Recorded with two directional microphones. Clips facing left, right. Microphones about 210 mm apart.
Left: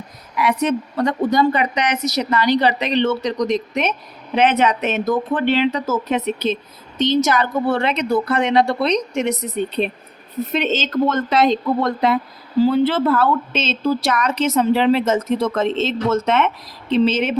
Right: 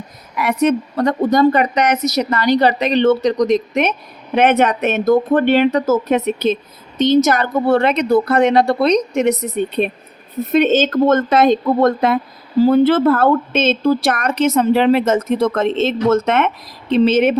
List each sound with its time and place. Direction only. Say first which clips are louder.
0.3 s speech: right 3 dB; 50° right (ahead or behind)
10.5 s speech: right 8 dB; 50° right (ahead or behind)